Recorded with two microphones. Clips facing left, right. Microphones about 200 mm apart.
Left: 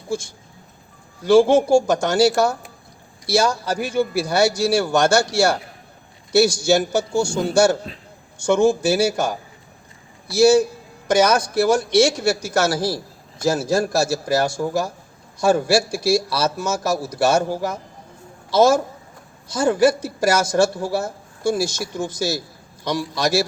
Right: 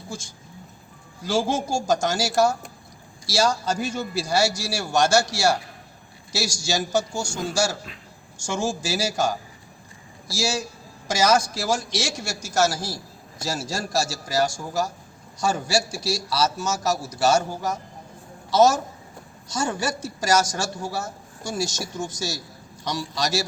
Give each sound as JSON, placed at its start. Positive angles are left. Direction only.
{"t": 1.2, "sound": "a man's voice", "side_deg": 60}
{"t": 18.5, "sound": "a man's voice", "side_deg": 55}